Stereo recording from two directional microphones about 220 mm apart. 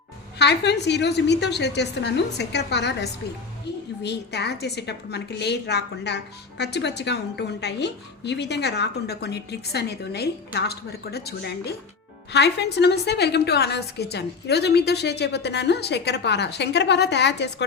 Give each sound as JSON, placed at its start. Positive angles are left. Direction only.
{"t": 0.3, "sound": "a woman's voice", "side_deg": 50}